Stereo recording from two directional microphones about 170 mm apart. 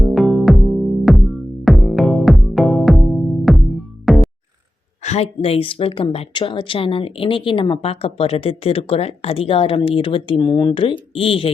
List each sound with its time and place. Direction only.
0.0 s music: centre (ahead or behind)
5.0 s a woman's voice: 40° left (ahead or behind)